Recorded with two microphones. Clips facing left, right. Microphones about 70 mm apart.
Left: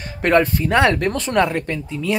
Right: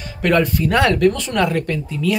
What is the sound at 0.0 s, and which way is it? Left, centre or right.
Speech, left.